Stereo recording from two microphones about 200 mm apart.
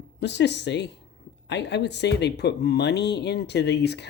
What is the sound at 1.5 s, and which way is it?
Speech, 60° left (ahead or behind).